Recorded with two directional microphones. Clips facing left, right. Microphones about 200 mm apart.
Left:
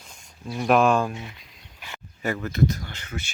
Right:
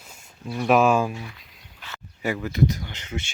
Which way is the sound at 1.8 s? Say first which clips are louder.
Even; 15° left (ahead or behind).